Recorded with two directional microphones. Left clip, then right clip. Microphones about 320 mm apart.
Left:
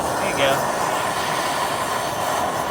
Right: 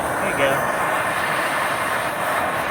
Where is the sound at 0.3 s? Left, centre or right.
Centre.